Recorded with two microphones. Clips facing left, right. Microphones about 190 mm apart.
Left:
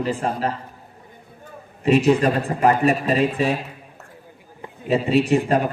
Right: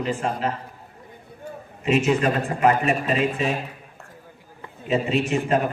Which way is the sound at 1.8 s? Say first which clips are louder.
Left 4 dB; 35° left (ahead or behind).